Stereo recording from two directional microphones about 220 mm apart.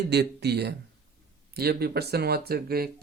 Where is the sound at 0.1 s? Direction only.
50° right (ahead or behind).